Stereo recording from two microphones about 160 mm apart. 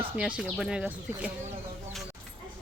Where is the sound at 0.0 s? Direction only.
5° right (ahead or behind).